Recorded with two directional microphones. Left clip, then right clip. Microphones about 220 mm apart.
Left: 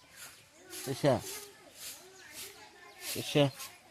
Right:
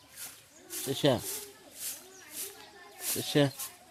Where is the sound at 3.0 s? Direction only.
45° right (ahead or behind).